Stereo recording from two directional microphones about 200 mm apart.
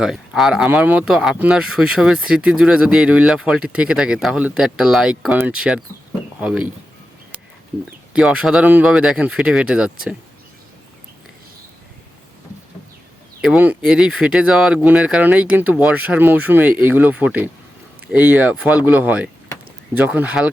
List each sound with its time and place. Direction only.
0.0 s speech: centre (ahead or behind)
8.1 s speech: 5° right (ahead or behind)
13.4 s speech: 5° right (ahead or behind)